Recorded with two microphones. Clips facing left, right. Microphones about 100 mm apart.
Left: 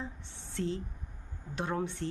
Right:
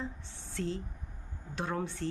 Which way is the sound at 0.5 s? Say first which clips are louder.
Left 1 dB; 20° left (ahead or behind).